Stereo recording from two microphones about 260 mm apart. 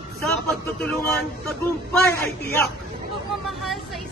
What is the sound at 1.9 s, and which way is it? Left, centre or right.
Speech, centre.